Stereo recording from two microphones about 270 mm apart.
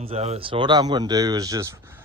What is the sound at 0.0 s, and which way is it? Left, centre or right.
A man's voice, right.